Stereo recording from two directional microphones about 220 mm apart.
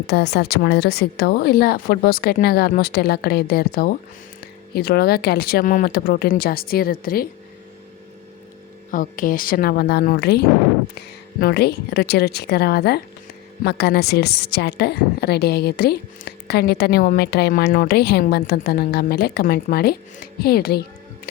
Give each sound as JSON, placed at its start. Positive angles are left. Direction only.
{"t": 0.1, "sound": "a woman's voice", "side_deg": 50}
{"t": 8.9, "sound": "a woman's voice", "side_deg": 40}